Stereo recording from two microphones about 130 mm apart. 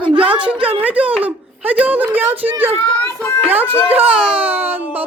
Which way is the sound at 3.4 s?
15° right (ahead or behind).